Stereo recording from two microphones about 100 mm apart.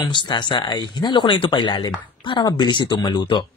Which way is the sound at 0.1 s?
50° left (ahead or behind).